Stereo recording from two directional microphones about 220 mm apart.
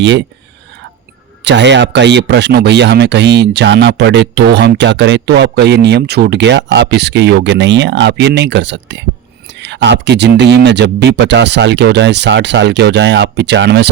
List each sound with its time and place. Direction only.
0.0 s speech: 55° right (ahead or behind)
1.5 s speech: 55° right (ahead or behind)